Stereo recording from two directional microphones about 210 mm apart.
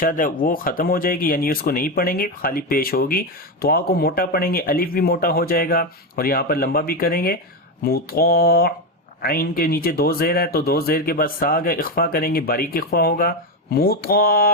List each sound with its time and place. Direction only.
0.0 s speech: 40° left (ahead or behind)